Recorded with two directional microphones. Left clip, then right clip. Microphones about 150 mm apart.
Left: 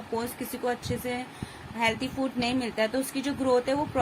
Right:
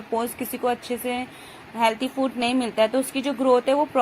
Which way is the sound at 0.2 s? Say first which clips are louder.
Right 6 dB; 35° right (ahead or behind).